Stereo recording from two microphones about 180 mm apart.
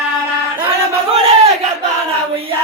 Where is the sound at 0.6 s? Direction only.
30° right (ahead or behind).